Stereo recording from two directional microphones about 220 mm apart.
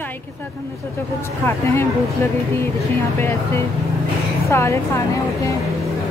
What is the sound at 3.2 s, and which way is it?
A woman's voice, 10° left (ahead or behind).